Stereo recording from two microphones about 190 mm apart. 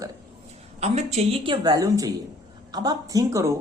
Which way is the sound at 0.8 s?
35° right (ahead or behind).